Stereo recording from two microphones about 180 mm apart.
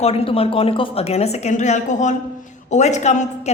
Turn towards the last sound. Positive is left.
turn(degrees=40)  # may be behind; listen again after turning